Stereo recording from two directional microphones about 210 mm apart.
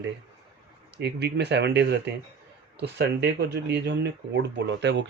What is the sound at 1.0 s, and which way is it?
Speech, 50° right (ahead or behind).